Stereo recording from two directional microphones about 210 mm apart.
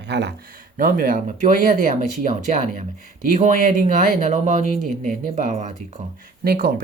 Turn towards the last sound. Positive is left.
turn(degrees=-45)  # may be behind; listen again after turning